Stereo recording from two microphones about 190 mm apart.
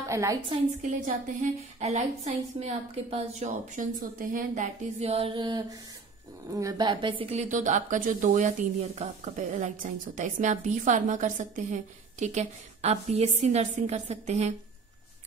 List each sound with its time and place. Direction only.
0.1 s a woman's voice: 15° right (ahead or behind)
0.5 s a woman's voice: 40° right (ahead or behind)